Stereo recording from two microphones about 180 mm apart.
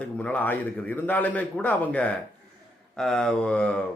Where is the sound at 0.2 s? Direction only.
10° left (ahead or behind).